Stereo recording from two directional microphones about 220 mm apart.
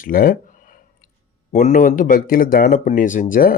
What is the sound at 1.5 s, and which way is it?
Speech, 35° left (ahead or behind).